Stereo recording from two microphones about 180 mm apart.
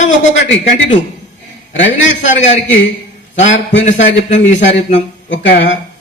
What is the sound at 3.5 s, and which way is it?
Speech, 90° left.